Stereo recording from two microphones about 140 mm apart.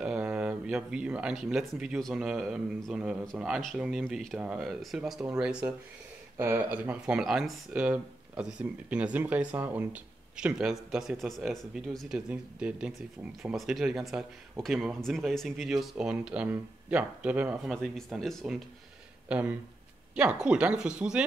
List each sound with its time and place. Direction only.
0.0 s speech: 5° right (ahead or behind)
17.7 s speech: 5° left (ahead or behind)